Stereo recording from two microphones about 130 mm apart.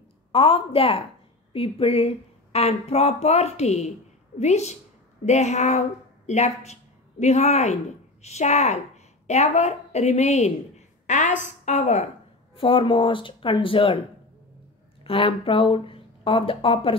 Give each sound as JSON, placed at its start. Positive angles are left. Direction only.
{"t": 0.3, "sound": "a woman's voice", "side_deg": 45}
{"t": 11.1, "sound": "a woman's voice", "side_deg": 70}
{"t": 12.5, "sound": "speech", "side_deg": 45}
{"t": 15.0, "sound": "speech", "side_deg": 45}